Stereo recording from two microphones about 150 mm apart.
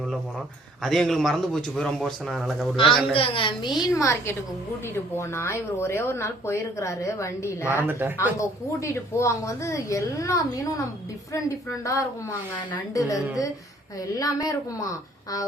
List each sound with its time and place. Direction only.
0.8 s a man's voice: centre (ahead or behind)
3.1 s a woman's voice: 35° left (ahead or behind); by 7.7 s 20° left (ahead or behind)
7.7 s speech: 15° right (ahead or behind)
8.4 s a woman's voice: 20° left (ahead or behind)